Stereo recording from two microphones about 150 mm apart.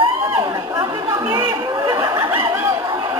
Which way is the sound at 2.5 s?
20° right (ahead or behind).